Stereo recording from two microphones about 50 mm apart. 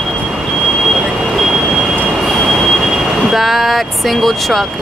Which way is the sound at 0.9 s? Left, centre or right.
Centre.